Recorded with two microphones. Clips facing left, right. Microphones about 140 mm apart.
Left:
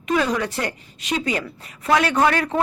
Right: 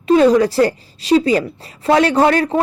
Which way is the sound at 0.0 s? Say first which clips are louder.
Right 10 dB; 30° right (ahead or behind).